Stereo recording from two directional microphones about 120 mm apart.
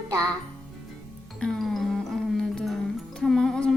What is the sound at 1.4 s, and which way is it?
Music, centre (ahead or behind).